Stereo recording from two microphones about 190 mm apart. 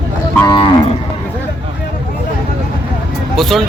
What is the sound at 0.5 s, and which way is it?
Cattle, 25° left (ahead or behind).